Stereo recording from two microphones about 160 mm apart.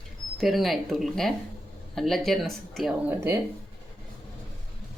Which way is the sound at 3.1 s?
15° right (ahead or behind).